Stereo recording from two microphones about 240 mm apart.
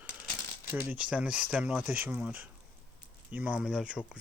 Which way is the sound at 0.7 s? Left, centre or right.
Centre.